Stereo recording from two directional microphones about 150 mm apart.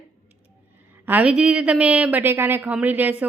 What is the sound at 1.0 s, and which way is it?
A woman's voice, 10° right (ahead or behind).